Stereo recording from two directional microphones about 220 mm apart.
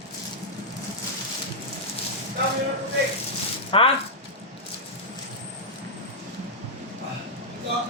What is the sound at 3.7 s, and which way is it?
Speech, 25° left (ahead or behind).